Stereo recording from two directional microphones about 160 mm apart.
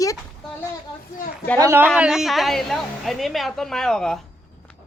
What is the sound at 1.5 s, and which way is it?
Speech, 15° right (ahead or behind).